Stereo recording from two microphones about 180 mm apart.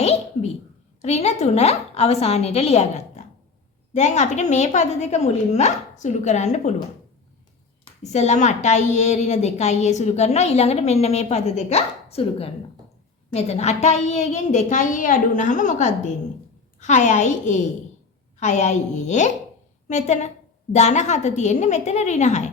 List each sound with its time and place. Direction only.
0.0 s a sound: 35° left (ahead or behind)
1.0 s a woman's voice: 40° left (ahead or behind)
8.0 s a woman's voice: 40° left (ahead or behind)